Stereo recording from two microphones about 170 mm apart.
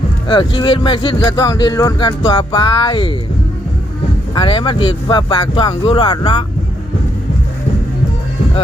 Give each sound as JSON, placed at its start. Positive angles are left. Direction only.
{"t": 0.3, "sound": "speech", "side_deg": 30}
{"t": 4.4, "sound": "speech", "side_deg": 30}